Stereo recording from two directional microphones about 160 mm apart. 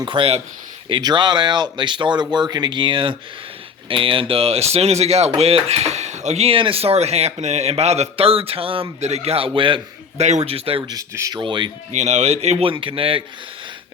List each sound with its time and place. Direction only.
0.0 s speech: 30° right (ahead or behind)
10.2 s speech: 40° right (ahead or behind)
11.9 s speech: 45° right (ahead or behind)